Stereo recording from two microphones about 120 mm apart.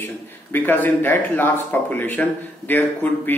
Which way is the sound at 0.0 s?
15° left (ahead or behind).